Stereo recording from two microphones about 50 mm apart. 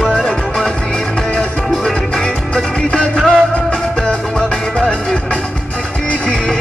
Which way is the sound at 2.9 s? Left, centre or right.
Centre.